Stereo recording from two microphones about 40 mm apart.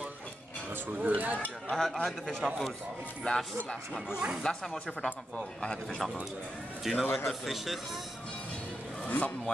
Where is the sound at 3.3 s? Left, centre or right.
Left.